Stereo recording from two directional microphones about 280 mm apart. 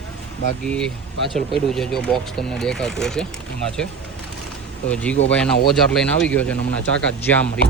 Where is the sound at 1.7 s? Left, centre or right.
Centre.